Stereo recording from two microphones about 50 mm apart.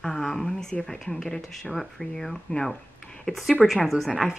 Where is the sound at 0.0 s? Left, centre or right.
Centre.